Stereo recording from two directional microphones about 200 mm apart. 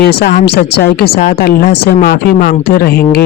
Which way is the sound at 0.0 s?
55° left (ahead or behind).